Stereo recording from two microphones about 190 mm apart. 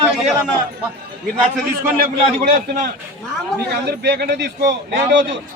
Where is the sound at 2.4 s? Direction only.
50° right (ahead or behind).